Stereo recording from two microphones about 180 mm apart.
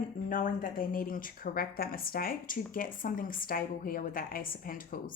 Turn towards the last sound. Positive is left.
turn(degrees=50)  # may be behind; listen again after turning